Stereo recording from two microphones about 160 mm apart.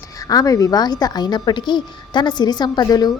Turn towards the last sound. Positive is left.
turn(degrees=25)  # may be behind; listen again after turning